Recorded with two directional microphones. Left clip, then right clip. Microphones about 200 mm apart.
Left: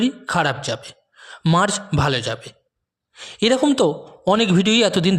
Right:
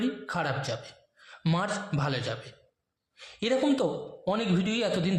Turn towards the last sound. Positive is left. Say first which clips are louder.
# left 12 dB
turn(degrees=45)  # may be behind; listen again after turning